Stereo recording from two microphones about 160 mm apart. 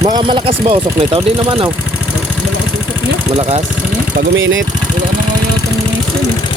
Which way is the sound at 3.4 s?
40° right (ahead or behind).